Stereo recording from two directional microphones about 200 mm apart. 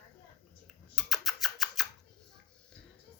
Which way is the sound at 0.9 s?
Centre (ahead or behind).